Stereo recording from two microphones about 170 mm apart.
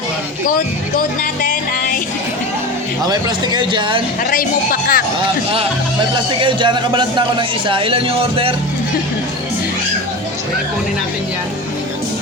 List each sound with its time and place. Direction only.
0.4 s music: 55° left (ahead or behind)
3.1 s a man's voice: 25° right (ahead or behind)
4.2 s a man's voice: 55° left (ahead or behind)
6.4 s a man's voice: 30° right (ahead or behind)